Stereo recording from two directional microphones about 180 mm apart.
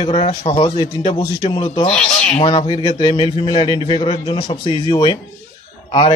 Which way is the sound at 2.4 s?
30° left (ahead or behind).